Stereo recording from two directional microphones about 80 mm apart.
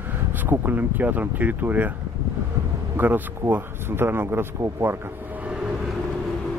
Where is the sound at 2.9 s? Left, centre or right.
Right.